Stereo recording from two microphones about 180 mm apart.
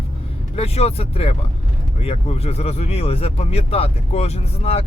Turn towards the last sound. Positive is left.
turn(degrees=35)  # may be behind; listen again after turning